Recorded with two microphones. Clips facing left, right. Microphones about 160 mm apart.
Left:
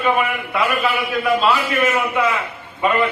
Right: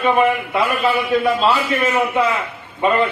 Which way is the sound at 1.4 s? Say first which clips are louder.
Even; 25° right (ahead or behind).